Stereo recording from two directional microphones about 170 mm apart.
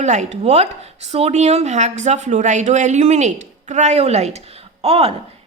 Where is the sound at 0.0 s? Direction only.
45° right (ahead or behind).